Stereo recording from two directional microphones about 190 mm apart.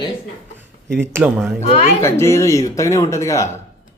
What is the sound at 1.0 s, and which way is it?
Speech, 10° right (ahead or behind).